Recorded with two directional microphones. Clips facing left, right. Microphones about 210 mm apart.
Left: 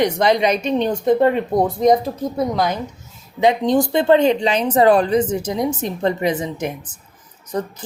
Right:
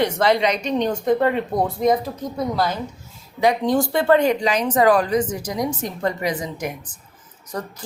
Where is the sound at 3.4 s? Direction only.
20° left (ahead or behind).